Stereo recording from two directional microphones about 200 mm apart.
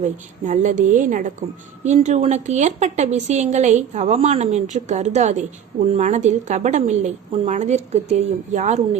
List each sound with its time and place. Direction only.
0.0 s a woman's voice: 40° right (ahead or behind)